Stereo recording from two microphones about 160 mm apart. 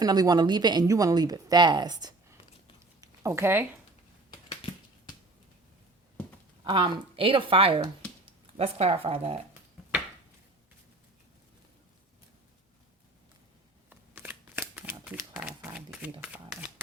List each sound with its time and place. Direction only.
0.0 s speech: 25° right (ahead or behind)
3.0 s a sound: 15° right (ahead or behind)
6.7 s speech: 35° right (ahead or behind)
13.9 s shuffling cards: 10° right (ahead or behind)